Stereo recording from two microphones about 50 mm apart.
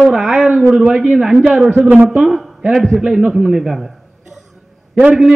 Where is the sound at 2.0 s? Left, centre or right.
Centre.